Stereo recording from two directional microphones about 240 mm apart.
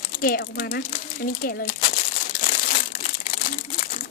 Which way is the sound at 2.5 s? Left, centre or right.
Left.